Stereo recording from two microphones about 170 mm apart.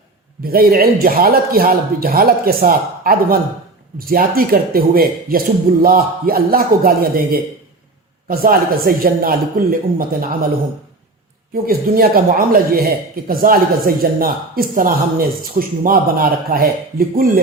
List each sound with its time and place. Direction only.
0.4 s a man's voice: 60° right (ahead or behind)
8.3 s a man's voice: 60° right (ahead or behind)
11.6 s a man's voice: 60° right (ahead or behind)